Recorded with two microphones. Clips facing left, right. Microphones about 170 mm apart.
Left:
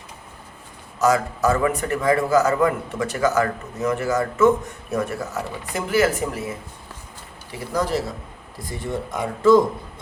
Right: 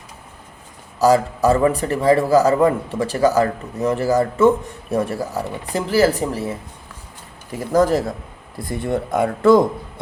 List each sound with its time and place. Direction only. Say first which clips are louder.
0.9 s a man's voice: right 4 dB; 30° right (ahead or behind)
7.5 s speech: right 7 dB; 45° right (ahead or behind)